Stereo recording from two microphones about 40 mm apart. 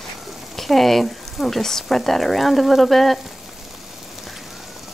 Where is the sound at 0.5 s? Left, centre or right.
Centre.